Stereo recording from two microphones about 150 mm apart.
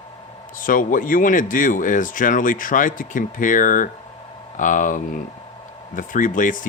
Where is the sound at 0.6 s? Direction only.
65° left (ahead or behind).